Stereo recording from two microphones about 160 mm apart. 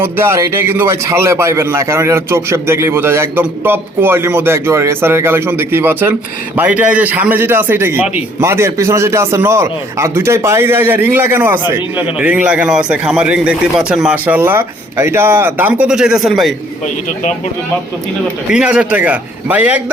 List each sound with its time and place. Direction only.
0.0 s a man's voice: 15° right (ahead or behind); by 16.6 s centre (ahead or behind)
18.4 s a man's voice: 5° right (ahead or behind)